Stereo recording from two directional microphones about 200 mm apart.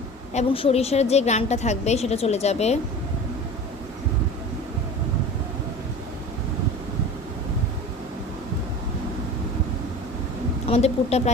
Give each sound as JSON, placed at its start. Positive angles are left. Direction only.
{"t": 0.3, "sound": "a woman's voice", "side_deg": 30}
{"t": 10.7, "sound": "a woman's voice", "side_deg": 30}